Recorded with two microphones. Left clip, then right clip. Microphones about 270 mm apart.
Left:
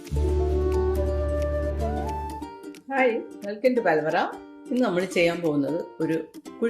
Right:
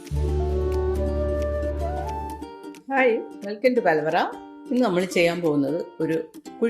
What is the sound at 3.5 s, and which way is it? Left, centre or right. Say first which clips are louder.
Speech: right 2 dB; centre.